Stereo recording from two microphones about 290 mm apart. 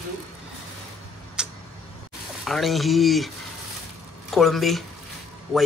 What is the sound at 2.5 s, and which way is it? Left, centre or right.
Speech, centre.